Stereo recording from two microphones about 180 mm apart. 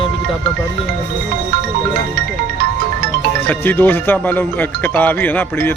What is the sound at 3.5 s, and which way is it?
Speech, 10° left (ahead or behind).